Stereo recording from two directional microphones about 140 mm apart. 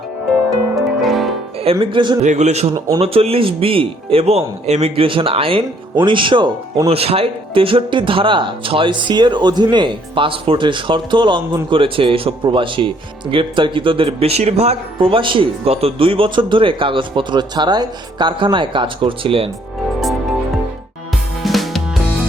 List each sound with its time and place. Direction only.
0.3 s music: centre (ahead or behind)
1.8 s speech: 35° right (ahead or behind)
2.2 s a man's voice: 55° right (ahead or behind)
2.7 s speech: 25° right (ahead or behind)
3.0 s speech: 45° right (ahead or behind)
21.4 s music: centre (ahead or behind)